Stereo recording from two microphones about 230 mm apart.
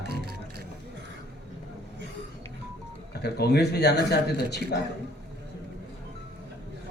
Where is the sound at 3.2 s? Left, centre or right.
Left.